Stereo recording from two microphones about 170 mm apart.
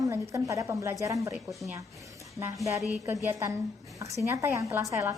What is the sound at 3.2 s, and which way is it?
A woman's voice, 15° right (ahead or behind).